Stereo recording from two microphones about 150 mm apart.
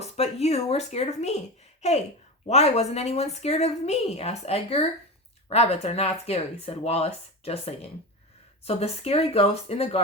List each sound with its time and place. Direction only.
0.0 s a woman's voice: 45° left (ahead or behind)